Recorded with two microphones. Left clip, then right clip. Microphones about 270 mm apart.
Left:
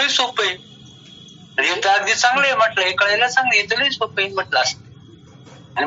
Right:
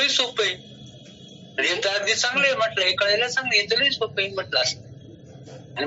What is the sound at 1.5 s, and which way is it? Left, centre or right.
A man's voice, centre.